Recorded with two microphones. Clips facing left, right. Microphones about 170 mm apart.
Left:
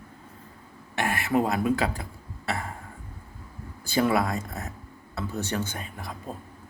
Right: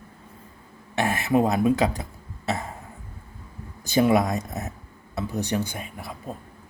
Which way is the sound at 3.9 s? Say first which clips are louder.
Right 4 dB; 20° right (ahead or behind).